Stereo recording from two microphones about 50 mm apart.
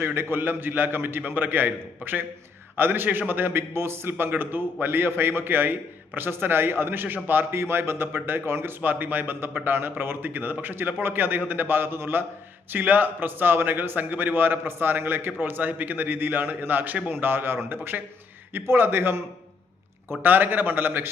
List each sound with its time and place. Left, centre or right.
0.0 s a man's voice: right
4.3 s a man's voice: right
8.8 s a man's voice: right
12.7 s a man's voice: right